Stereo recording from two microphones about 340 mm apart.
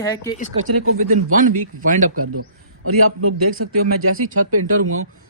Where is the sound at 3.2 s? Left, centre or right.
Right.